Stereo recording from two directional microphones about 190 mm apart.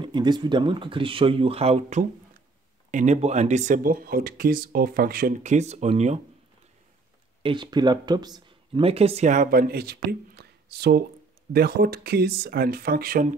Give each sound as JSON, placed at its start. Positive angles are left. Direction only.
{"t": 0.0, "sound": "speech", "side_deg": -25}
{"t": 7.4, "sound": "speech", "side_deg": -25}